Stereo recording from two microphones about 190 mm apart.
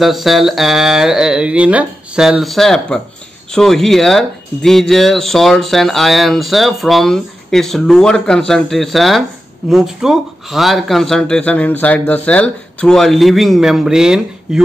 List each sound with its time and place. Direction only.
0.0 s speech: centre (ahead or behind)